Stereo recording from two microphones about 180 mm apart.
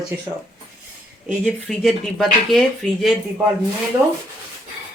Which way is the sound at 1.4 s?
Centre (ahead or behind).